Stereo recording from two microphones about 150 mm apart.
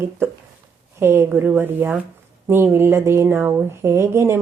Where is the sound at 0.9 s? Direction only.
15° right (ahead or behind).